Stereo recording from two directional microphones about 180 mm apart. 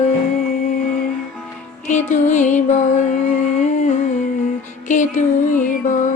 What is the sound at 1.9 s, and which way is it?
Music, 40° left (ahead or behind).